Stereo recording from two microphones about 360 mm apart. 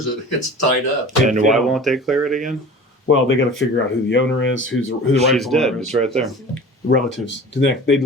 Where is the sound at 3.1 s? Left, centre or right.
Left.